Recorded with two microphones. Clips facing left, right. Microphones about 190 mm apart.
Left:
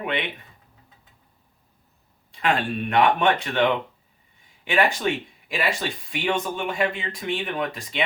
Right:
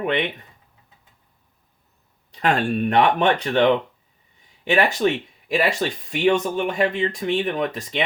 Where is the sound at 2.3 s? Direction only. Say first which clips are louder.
Right 3 dB; 45° right (ahead or behind).